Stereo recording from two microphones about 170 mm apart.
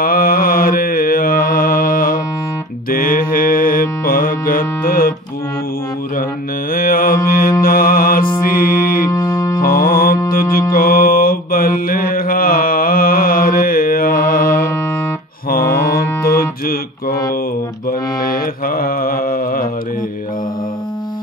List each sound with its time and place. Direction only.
0.0 s mantra: 60° left (ahead or behind)
6.7 s mantra: 55° left (ahead or behind)
8.4 s music: 55° left (ahead or behind)
9.1 s music: 15° left (ahead or behind)
9.6 s music: 55° left (ahead or behind)
10.7 s mantra: 60° left (ahead or behind)